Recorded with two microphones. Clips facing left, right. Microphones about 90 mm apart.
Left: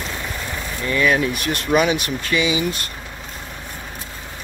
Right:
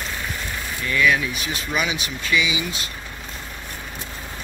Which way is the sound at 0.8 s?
35° left (ahead or behind).